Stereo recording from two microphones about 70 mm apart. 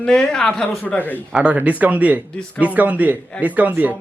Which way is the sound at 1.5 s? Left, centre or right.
Right.